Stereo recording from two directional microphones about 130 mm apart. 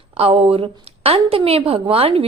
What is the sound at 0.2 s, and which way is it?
A woman's voice, 50° right (ahead or behind).